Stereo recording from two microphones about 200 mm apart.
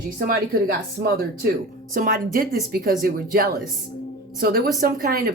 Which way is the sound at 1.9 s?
45° right (ahead or behind).